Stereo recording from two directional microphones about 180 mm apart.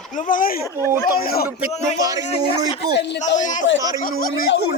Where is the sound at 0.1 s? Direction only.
45° left (ahead or behind).